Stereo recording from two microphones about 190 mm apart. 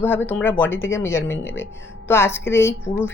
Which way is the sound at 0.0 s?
10° left (ahead or behind).